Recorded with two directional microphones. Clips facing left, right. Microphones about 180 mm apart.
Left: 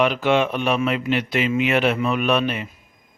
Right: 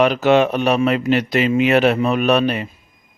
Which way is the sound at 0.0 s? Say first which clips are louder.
Right 5 dB; 40° right (ahead or behind).